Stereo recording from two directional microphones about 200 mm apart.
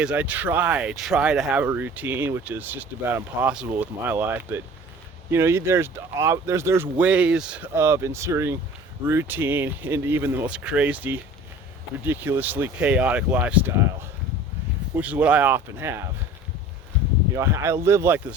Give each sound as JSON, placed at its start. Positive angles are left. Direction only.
{"t": 0.0, "sound": "speech", "side_deg": -5}
{"t": 15.0, "sound": "speech", "side_deg": -5}
{"t": 17.3, "sound": "speech", "side_deg": -15}